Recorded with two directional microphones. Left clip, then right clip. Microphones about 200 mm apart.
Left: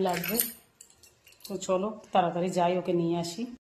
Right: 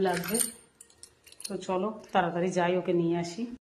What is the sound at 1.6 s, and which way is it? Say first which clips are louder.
Speech: left 2 dB; 15° left (ahead or behind).